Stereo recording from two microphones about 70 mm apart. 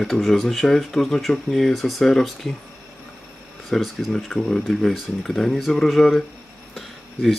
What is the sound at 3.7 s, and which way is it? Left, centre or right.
Speech, centre.